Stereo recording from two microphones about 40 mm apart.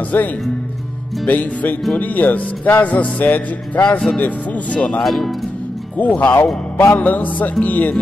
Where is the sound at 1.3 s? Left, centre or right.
Left.